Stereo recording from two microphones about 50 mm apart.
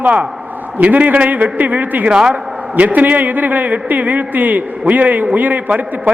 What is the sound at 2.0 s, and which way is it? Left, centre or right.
Speech, centre.